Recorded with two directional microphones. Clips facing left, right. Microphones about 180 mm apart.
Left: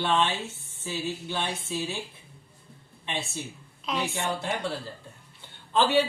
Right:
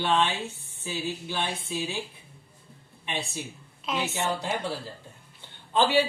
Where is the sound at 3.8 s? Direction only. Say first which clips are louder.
Even; centre (ahead or behind).